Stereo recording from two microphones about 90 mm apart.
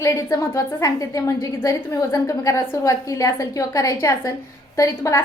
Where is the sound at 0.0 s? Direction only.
35° left (ahead or behind).